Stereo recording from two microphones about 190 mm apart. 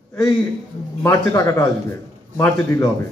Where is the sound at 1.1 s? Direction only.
20° left (ahead or behind).